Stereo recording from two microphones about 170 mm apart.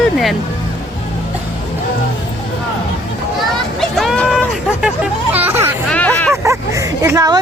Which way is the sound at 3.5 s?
Centre (ahead or behind).